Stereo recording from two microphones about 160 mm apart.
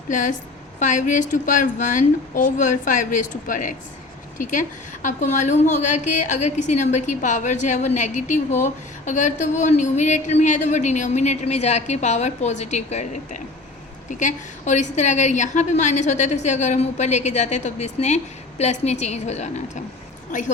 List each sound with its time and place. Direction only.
0.1 s a woman's voice: 55° left (ahead or behind)